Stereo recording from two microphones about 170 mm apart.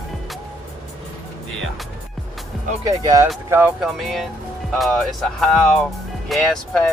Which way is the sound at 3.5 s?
5° right (ahead or behind).